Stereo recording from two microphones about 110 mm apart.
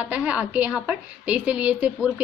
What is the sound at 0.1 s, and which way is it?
A woman's voice, 10° right (ahead or behind).